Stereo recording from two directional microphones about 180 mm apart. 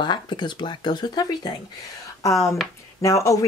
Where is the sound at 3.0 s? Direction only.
20° left (ahead or behind).